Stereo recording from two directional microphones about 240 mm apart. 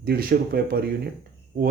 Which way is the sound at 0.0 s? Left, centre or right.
Right.